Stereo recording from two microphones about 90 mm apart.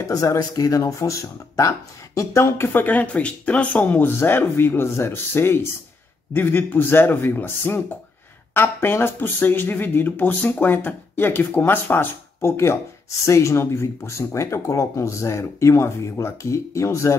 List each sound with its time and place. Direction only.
0.0 s speech: 40° left (ahead or behind)
2.1 s speech: 30° left (ahead or behind)